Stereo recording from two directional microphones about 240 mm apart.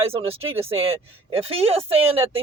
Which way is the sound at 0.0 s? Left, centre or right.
Right.